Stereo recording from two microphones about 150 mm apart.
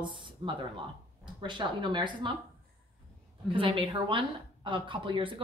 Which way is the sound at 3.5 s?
35° right (ahead or behind).